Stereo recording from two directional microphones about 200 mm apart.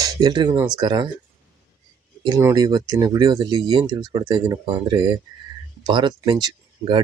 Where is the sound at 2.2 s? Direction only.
15° right (ahead or behind).